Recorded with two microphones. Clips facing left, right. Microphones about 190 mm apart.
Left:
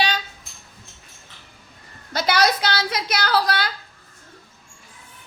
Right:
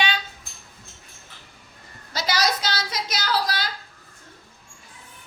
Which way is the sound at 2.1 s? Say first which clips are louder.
Left 5 dB; 60° left (ahead or behind).